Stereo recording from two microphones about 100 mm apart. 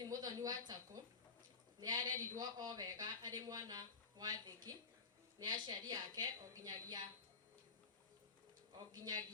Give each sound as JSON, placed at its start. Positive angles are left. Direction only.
{"t": 0.0, "sound": "a sound", "side_deg": -40}
{"t": 1.8, "sound": "speech", "side_deg": -40}
{"t": 8.9, "sound": "a man's voice", "side_deg": -40}